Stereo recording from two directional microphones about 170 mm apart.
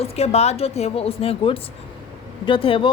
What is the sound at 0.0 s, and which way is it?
A woman's voice, 40° left (ahead or behind).